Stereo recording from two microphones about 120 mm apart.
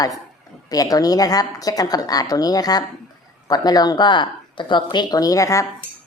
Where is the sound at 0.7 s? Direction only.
30° left (ahead or behind).